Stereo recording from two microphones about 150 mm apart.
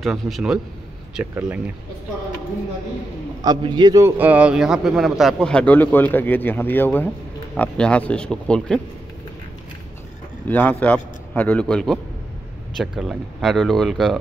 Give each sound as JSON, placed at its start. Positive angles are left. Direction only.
{"t": 0.0, "sound": "speech", "side_deg": 0}
{"t": 3.4, "sound": "a man's voice", "side_deg": -30}
{"t": 4.2, "sound": "a man's voice", "side_deg": -10}
{"t": 10.5, "sound": "a man's voice", "side_deg": 10}